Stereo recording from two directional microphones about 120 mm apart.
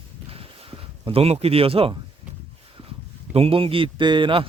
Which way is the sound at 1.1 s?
55° right (ahead or behind).